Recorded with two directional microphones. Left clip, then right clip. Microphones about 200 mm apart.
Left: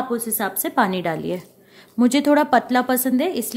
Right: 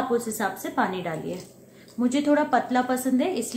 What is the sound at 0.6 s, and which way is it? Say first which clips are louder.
A woman's voice: left 6 dB; 50° left (ahead or behind).